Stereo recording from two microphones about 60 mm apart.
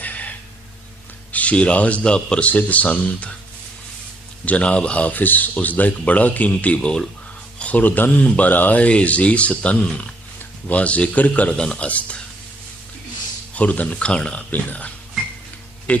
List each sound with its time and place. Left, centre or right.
0.0 s gasp: left
1.3 s speech: left
4.4 s speech: left
6.7 s speech: centre
7.6 s speech: left
11.5 s speech: centre
13.5 s speech: left